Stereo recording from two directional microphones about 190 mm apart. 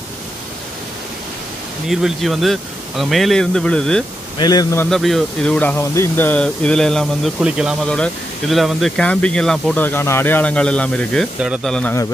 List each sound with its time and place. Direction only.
1.9 s speech: centre (ahead or behind)
4.4 s speech: 20° left (ahead or behind)
4.8 s speech: centre (ahead or behind)